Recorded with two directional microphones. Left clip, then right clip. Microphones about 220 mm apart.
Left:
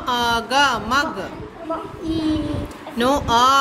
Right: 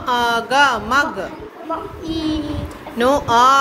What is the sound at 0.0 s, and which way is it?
A woman's voice, 20° left (ahead or behind).